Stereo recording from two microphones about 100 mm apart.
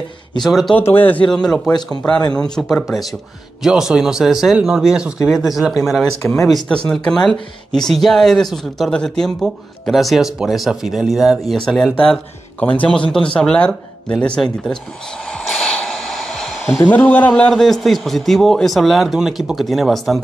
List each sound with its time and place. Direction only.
0.4 s speech: centre (ahead or behind)
0.7 s speech: 20° left (ahead or behind)
1.3 s speech: 5° left (ahead or behind)
12.5 s speech: 15° left (ahead or behind)
15.3 s a sound: 10° left (ahead or behind)
16.7 s speech: 20° left (ahead or behind)
17.3 s speech: 5° left (ahead or behind)